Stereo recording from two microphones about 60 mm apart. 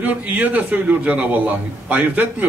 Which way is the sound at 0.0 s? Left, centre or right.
Right.